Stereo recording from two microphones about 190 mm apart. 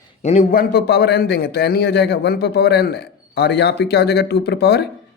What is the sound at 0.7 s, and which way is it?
A man's voice, 60° left (ahead or behind).